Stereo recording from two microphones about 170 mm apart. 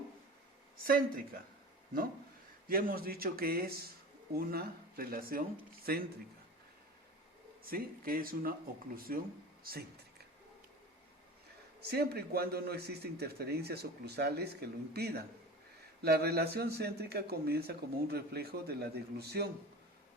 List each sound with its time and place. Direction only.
0.9 s speech: 55° right (ahead or behind)
2.6 s speech: 60° right (ahead or behind)
7.6 s speech: 60° right (ahead or behind)
11.8 s a man's voice: 70° right (ahead or behind)